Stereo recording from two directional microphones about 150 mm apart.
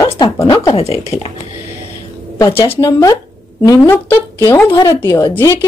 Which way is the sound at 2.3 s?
20° left (ahead or behind).